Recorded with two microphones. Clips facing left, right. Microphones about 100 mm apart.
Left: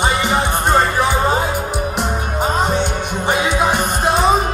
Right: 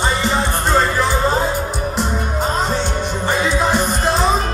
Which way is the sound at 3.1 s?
10° left (ahead or behind).